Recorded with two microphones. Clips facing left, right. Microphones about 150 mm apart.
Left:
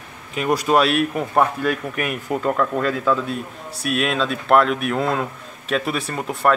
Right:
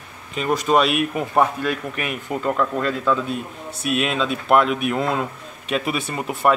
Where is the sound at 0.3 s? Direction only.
5° left (ahead or behind).